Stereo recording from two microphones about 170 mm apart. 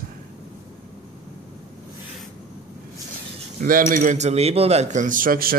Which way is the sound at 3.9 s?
45° right (ahead or behind).